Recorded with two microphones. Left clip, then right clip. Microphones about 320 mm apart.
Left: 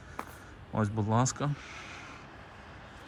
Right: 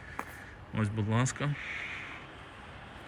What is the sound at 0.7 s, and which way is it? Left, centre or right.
Speech, centre.